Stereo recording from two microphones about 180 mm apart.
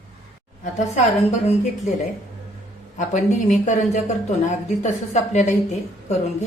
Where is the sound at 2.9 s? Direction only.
45° left (ahead or behind).